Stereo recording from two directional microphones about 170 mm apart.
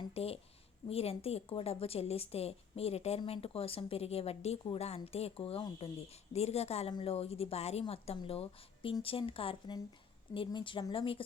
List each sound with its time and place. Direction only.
0.1 s a woman's voice: 35° left (ahead or behind)